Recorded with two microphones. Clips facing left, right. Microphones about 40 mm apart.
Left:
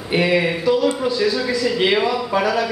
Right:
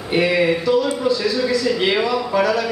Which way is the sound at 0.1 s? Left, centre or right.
Centre.